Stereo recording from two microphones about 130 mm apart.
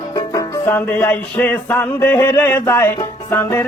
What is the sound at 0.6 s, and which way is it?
Music, 15° left (ahead or behind).